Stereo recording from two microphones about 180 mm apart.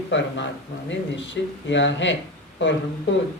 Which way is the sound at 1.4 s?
75° left (ahead or behind).